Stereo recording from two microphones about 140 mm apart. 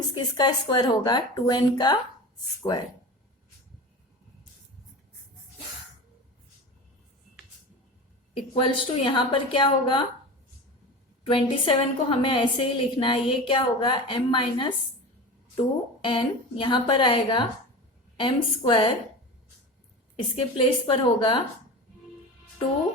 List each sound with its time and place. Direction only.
0.1 s a woman's voice: 30° left (ahead or behind)
8.5 s a woman's voice: 35° left (ahead or behind)
11.2 s a woman's voice: 40° left (ahead or behind)
20.1 s a woman's voice: 40° left (ahead or behind)